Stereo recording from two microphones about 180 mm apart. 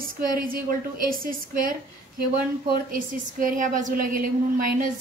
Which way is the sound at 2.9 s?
50° right (ahead or behind).